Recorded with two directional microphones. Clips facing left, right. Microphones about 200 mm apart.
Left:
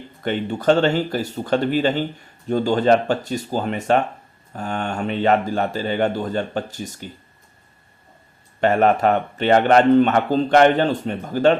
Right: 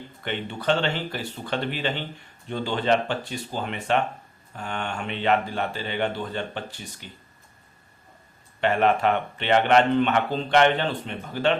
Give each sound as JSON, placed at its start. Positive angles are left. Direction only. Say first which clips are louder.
{"t": 0.2, "sound": "speech", "louder": "left 8 dB", "side_deg": 45}
{"t": 8.6, "sound": "speech", "louder": "left 5 dB", "side_deg": 40}